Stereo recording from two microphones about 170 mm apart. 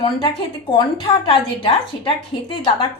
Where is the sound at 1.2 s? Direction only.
30° left (ahead or behind).